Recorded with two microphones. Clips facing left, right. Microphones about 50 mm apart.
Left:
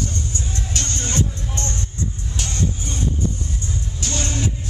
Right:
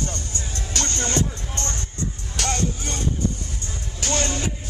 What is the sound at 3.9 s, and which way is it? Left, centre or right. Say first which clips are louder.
Music: right 5 dB; right.